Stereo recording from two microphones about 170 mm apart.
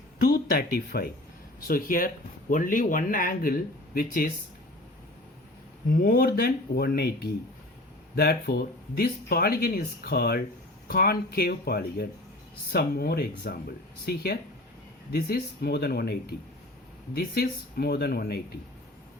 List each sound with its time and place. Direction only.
0.3 s speech: 65° left (ahead or behind)
5.9 s speech: 60° left (ahead or behind)